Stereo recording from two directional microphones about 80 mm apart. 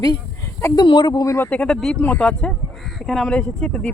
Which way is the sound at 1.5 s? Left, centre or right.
Centre.